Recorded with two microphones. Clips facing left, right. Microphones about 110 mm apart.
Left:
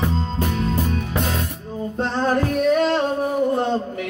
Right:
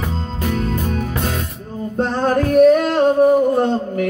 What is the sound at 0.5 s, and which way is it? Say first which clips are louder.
Music: right 5 dB; 45° right (ahead or behind).